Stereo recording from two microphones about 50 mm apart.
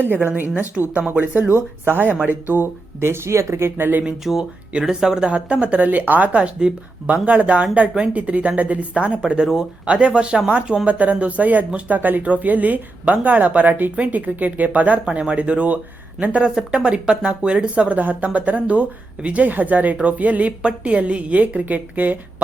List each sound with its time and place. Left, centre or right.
0.1 s speech: right
1.9 s speech: right
3.8 s speech: right
4.2 s speech: centre; by 6.3 s right
6.3 s speech: centre
10.8 s speech: right
15.0 s speech: right